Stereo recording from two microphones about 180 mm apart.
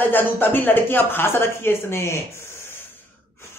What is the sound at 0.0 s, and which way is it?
Speech, 10° left (ahead or behind).